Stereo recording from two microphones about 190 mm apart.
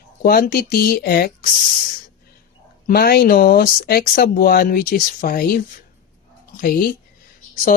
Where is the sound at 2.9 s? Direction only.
55° left (ahead or behind).